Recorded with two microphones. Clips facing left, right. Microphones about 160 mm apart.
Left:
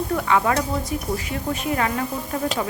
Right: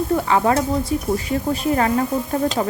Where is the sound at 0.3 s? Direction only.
30° right (ahead or behind).